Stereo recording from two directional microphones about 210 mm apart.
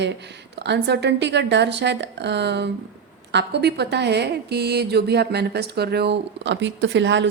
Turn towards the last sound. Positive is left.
turn(degrees=-55)  # may be behind; listen again after turning